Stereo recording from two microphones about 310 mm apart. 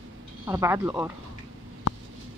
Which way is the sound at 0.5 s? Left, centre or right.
Centre.